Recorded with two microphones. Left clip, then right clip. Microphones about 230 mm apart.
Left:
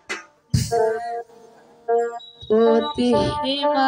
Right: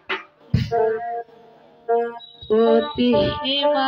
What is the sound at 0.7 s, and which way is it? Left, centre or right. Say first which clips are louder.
Music: even; left.